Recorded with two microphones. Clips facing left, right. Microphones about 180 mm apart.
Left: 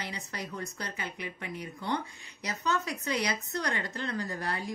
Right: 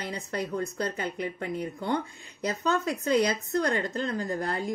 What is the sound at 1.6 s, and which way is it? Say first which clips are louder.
Speech: right 2 dB; 50° right (ahead or behind).